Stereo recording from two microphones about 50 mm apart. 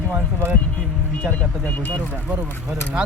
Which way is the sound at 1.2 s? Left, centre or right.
Left.